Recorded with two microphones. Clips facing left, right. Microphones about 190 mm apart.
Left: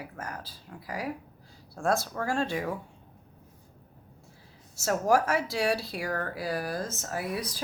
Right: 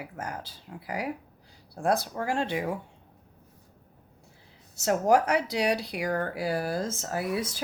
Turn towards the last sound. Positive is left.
turn(degrees=-25)  # may be behind; listen again after turning